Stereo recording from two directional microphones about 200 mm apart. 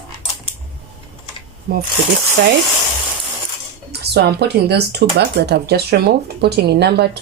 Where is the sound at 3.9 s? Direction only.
55° right (ahead or behind).